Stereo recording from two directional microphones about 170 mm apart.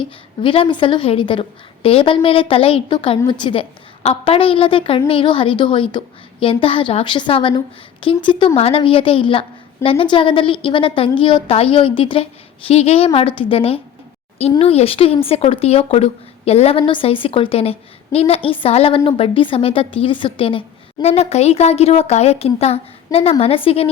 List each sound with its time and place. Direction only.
0.4 s a woman's voice: 30° left (ahead or behind)